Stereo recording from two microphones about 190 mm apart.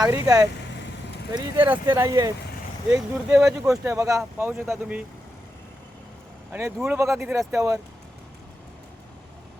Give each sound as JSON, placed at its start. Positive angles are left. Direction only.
{"t": 0.0, "sound": "speech", "side_deg": -20}
{"t": 2.9, "sound": "speech", "side_deg": -5}
{"t": 6.5, "sound": "speech", "side_deg": -15}